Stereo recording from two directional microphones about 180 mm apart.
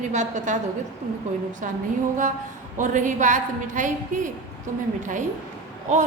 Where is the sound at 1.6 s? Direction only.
45° right (ahead or behind).